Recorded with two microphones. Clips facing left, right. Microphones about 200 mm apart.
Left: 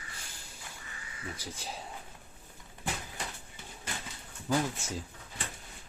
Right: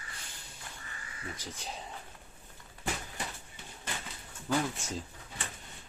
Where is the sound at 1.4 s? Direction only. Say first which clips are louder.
Left 1 dB; 5° left (ahead or behind).